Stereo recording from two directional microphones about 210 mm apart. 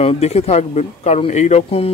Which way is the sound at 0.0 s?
30° left (ahead or behind).